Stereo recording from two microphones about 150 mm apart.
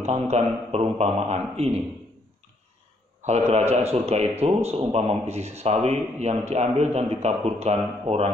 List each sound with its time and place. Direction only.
0.0 s a man's voice: 45° right (ahead or behind)
3.2 s a man's voice: 50° right (ahead or behind)